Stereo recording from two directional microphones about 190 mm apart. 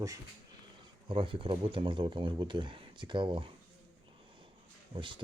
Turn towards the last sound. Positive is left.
turn(degrees=-25)  # may be behind; listen again after turning